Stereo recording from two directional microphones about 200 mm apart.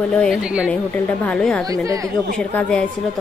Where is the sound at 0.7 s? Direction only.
5° left (ahead or behind).